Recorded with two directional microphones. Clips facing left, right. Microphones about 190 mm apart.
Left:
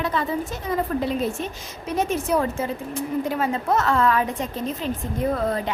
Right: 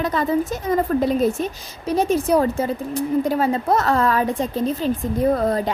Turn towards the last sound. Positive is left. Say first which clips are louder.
# right 5 dB
turn(degrees=-40)  # may be behind; listen again after turning